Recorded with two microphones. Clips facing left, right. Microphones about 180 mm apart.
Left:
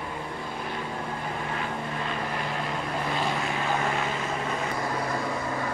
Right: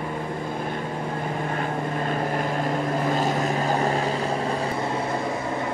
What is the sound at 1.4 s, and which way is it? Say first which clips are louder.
Vehicle: right 5 dB; 45° right (ahead or behind).